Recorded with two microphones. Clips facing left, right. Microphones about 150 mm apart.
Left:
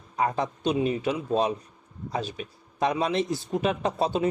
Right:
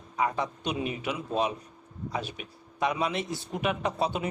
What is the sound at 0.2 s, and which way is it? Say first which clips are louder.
A man's voice: left 3 dB; 35° left (ahead or behind).